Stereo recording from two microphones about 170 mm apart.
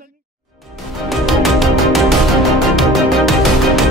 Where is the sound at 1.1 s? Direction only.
Centre (ahead or behind).